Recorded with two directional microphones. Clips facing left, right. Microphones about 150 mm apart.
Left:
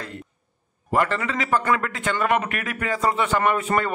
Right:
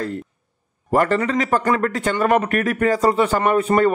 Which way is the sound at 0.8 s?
45° right (ahead or behind).